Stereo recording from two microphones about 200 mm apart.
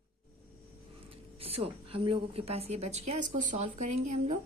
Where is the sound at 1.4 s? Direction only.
30° right (ahead or behind).